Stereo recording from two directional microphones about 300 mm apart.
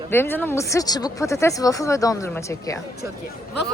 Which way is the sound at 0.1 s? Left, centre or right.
Centre.